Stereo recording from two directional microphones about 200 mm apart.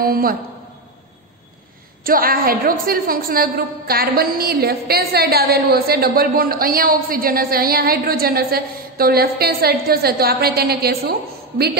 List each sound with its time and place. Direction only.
0.0 s a woman's voice: 45° right (ahead or behind)
2.0 s a woman's voice: 45° right (ahead or behind)